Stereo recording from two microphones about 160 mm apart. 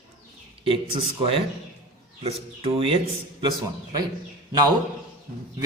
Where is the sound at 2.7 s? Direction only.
35° right (ahead or behind).